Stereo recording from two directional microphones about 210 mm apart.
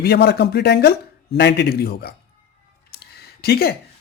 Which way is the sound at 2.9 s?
50° left (ahead or behind).